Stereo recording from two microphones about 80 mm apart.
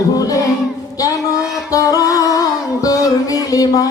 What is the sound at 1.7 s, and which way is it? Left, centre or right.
Speech, left.